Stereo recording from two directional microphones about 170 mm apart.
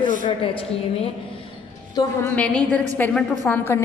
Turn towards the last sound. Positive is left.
turn(degrees=15)  # may be behind; listen again after turning